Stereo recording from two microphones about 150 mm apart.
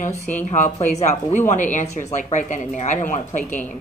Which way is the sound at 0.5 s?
50° left (ahead or behind).